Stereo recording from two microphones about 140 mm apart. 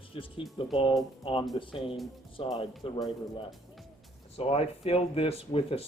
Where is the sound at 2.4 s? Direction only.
50° left (ahead or behind).